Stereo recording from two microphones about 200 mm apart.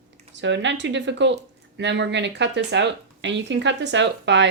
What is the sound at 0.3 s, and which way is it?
Speech, 65° right (ahead or behind).